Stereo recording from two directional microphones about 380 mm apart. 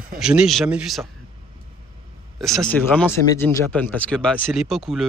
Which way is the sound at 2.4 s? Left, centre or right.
Centre.